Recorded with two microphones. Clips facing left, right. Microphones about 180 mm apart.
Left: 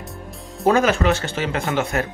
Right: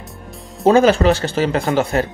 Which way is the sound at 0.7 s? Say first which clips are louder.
Right 5 dB; 30° right (ahead or behind).